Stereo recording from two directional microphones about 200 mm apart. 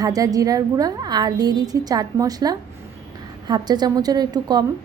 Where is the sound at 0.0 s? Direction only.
20° right (ahead or behind).